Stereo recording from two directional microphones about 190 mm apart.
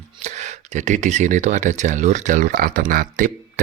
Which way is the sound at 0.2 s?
40° right (ahead or behind).